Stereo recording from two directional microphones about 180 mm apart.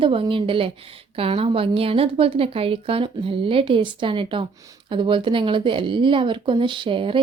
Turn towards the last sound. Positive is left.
turn(degrees=-30)  # may be behind; listen again after turning